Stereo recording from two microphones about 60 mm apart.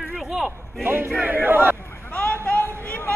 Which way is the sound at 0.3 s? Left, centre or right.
Centre.